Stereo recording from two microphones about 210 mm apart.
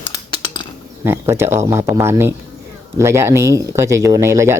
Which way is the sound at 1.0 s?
10° right (ahead or behind).